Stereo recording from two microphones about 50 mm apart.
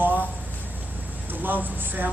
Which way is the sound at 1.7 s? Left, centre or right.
Right.